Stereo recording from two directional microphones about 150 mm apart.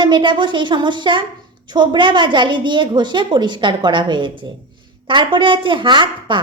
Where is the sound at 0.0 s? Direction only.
30° right (ahead or behind).